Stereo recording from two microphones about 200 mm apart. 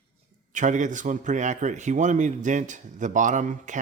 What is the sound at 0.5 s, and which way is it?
A man's voice, 40° right (ahead or behind).